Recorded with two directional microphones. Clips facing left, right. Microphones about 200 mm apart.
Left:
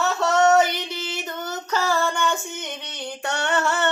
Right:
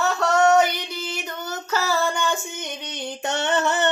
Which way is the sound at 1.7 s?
5° right (ahead or behind).